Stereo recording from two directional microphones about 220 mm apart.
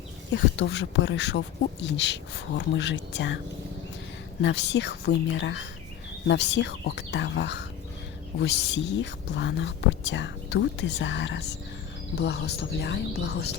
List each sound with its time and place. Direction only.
0.3 s speech: 55° left (ahead or behind)
4.4 s speech: 50° left (ahead or behind)